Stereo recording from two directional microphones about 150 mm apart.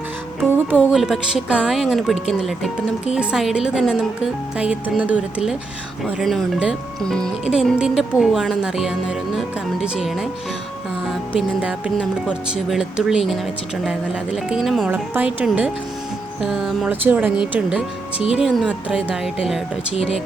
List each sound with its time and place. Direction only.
0.3 s music: 15° right (ahead or behind)
0.9 s speech: 5° right (ahead or behind)
3.2 s speech: 5° right (ahead or behind)
14.8 s speech: 10° right (ahead or behind)
19.9 s speech: 40° left (ahead or behind)